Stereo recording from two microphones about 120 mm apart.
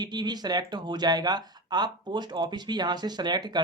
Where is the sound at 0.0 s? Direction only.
35° right (ahead or behind).